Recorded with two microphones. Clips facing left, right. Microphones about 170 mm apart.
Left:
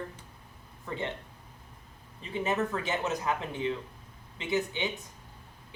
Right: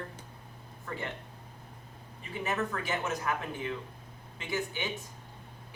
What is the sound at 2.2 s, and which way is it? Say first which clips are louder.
Speech: left 3 dB; 20° left (ahead or behind).